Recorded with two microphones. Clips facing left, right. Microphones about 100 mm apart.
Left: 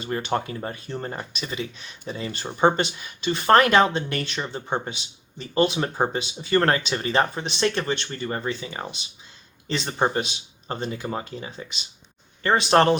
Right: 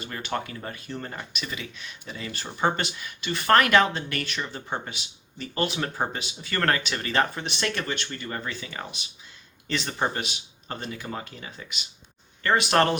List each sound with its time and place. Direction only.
0.1 s speech: 30° left (ahead or behind)